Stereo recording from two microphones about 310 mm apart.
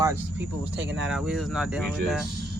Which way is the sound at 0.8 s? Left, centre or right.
Right.